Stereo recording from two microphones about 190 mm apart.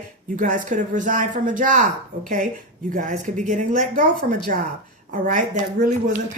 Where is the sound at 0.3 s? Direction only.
45° right (ahead or behind).